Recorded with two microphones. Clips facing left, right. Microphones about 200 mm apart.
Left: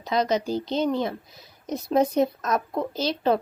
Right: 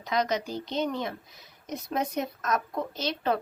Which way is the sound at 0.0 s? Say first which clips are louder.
Left 4 dB; 30° left (ahead or behind).